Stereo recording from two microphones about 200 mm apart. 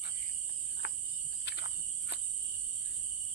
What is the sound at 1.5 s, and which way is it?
Insect, 60° left (ahead or behind).